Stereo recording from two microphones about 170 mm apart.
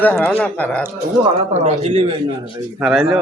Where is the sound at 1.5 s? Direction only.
40° right (ahead or behind).